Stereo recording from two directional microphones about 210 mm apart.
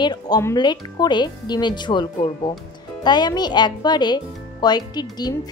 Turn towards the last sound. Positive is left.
turn(degrees=20)  # may be behind; listen again after turning